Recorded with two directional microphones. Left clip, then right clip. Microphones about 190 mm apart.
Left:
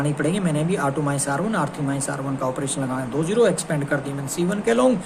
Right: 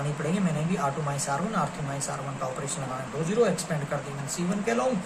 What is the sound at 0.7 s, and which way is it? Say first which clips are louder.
Speech: left 5 dB; 55° left (ahead or behind).